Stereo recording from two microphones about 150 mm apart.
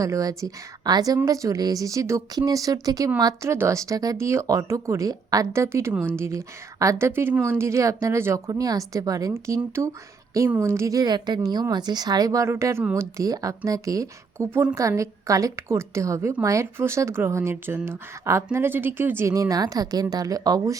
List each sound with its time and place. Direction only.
0.0 s speech: 25° right (ahead or behind)